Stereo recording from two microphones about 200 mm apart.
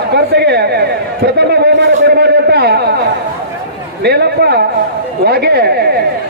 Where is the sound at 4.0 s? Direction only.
55° right (ahead or behind).